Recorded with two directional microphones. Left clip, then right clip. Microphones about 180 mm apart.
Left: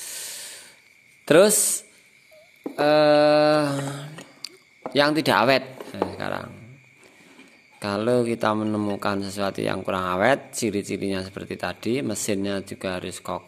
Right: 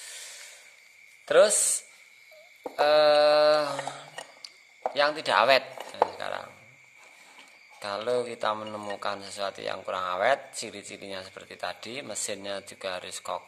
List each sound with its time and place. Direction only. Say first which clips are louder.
1.2 s speech: left 4 dB; 35° left (ahead or behind)
2.7 s speech: left 3 dB; 20° left (ahead or behind)
4.4 s a sound: left 7 dB; 40° left (ahead or behind)
4.9 s speech: left 5 dB; 35° left (ahead or behind)
6.0 s music: left 5 dB; 25° left (ahead or behind)
7.8 s speech: left 6 dB; 30° left (ahead or behind)